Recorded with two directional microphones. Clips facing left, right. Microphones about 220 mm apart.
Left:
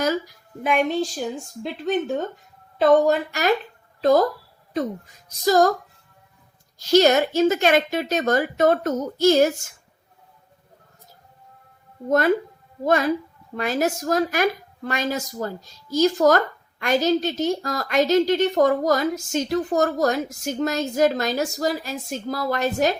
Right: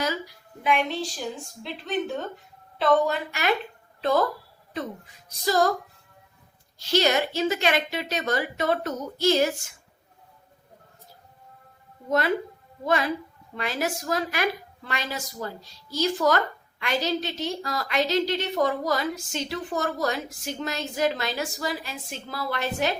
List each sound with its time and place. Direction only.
0.0 s a woman's voice: 45° left (ahead or behind)
6.7 s a woman's voice: 45° left (ahead or behind)
12.8 s a woman's voice: 45° left (ahead or behind)